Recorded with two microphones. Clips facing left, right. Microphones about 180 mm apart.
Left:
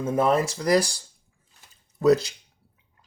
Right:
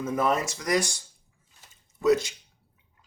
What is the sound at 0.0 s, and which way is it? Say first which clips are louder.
Speech: left 4 dB; 30° left (ahead or behind).